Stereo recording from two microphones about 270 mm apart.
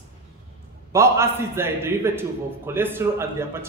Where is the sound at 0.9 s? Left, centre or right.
Centre.